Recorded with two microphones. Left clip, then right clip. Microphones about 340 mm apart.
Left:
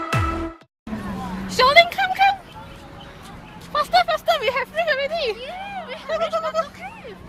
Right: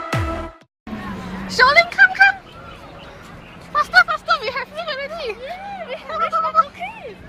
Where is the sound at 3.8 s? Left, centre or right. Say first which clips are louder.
Right 4 dB; centre.